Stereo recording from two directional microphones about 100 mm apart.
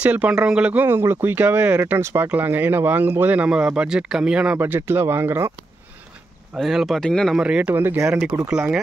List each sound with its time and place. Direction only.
0.0 s speech: 15° right (ahead or behind)
4.6 s speech: 20° right (ahead or behind)
6.5 s speech: centre (ahead or behind)
7.3 s speech: 10° right (ahead or behind)